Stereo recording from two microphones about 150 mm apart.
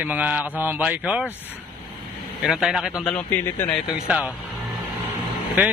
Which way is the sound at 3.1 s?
15° left (ahead or behind).